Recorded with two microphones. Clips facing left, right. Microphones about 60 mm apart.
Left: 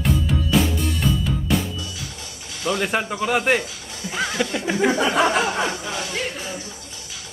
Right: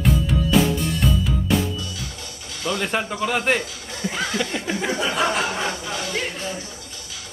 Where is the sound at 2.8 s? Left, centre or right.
Centre.